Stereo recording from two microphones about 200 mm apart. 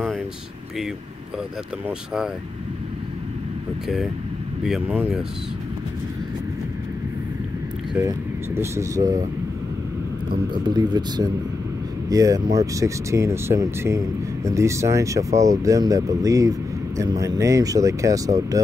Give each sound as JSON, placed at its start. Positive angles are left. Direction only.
{"t": 1.9, "sound": "speech", "side_deg": -5}
{"t": 3.8, "sound": "speech", "side_deg": 0}
{"t": 8.5, "sound": "speech", "side_deg": -15}
{"t": 10.6, "sound": "speech", "side_deg": -20}